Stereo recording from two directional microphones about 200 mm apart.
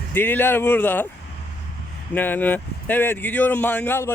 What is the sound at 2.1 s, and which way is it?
Speech, 10° left (ahead or behind).